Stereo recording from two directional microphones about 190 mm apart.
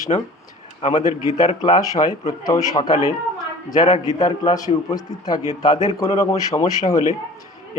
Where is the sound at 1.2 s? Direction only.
20° left (ahead or behind).